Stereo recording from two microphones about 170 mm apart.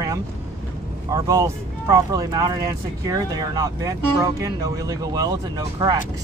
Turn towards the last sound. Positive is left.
turn(degrees=-20)  # may be behind; listen again after turning